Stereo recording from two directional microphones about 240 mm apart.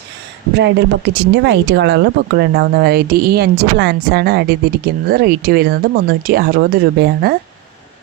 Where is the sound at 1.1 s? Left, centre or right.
Right.